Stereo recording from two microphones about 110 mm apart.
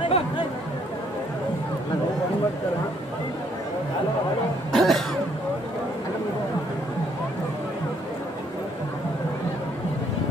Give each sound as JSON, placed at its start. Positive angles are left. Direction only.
{"t": 0.0, "sound": "chatter", "side_deg": 50}
{"t": 4.7, "sound": "cough", "side_deg": 0}